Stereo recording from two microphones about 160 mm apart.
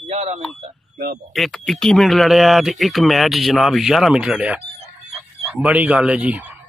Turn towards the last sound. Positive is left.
turn(degrees=-10)  # may be behind; listen again after turning